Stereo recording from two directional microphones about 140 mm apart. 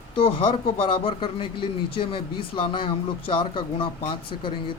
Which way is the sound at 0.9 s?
40° left (ahead or behind).